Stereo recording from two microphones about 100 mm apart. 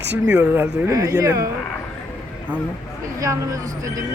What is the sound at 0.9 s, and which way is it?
Speech, 35° right (ahead or behind).